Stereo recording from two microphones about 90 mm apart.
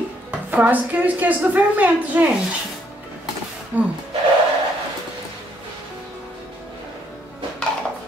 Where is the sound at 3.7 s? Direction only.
20° right (ahead or behind).